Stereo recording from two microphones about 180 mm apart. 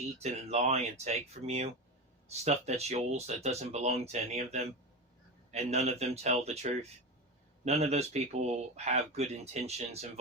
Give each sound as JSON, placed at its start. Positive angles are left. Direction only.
{"t": 0.2, "sound": "speech", "side_deg": -35}